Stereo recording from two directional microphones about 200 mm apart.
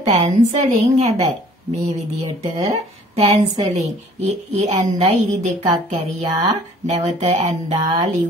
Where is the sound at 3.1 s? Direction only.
35° right (ahead or behind).